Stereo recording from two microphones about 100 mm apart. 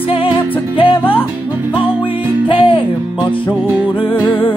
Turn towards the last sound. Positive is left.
turn(degrees=60)  # may be behind; listen again after turning